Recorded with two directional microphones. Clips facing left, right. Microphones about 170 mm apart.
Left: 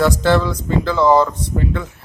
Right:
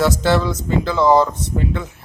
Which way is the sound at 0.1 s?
15° right (ahead or behind).